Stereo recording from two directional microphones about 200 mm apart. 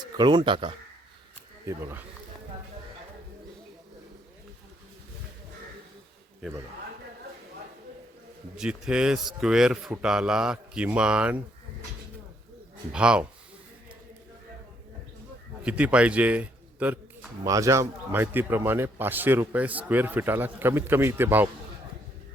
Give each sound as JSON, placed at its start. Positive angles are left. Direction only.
{"t": 0.0, "sound": "speech", "side_deg": -20}
{"t": 1.6, "sound": "a man's voice", "side_deg": -10}
{"t": 8.5, "sound": "speech", "side_deg": -5}
{"t": 12.9, "sound": "speech", "side_deg": -5}
{"t": 15.6, "sound": "a man's voice", "side_deg": -5}